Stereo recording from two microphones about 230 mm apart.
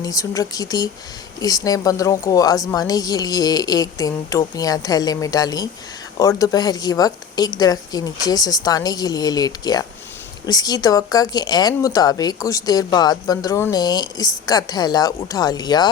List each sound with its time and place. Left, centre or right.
0.0 s speech: centre